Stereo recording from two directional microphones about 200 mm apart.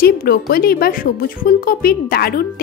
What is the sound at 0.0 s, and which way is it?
Speech, 50° left (ahead or behind).